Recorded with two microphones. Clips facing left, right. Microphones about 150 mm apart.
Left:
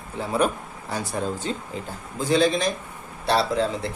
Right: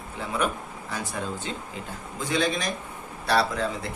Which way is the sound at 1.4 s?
40° left (ahead or behind).